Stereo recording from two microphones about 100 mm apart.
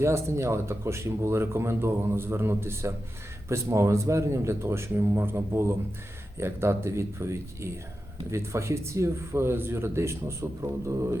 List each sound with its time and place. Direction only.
0.0 s speech: 25° right (ahead or behind)